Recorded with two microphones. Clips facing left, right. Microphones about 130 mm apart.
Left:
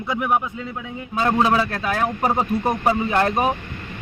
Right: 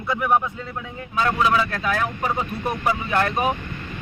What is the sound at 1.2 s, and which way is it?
A man's voice, 30° left (ahead or behind).